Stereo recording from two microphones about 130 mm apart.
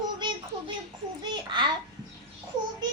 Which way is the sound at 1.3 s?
35° right (ahead or behind).